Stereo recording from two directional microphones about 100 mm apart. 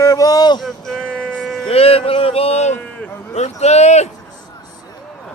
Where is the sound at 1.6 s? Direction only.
75° left (ahead or behind).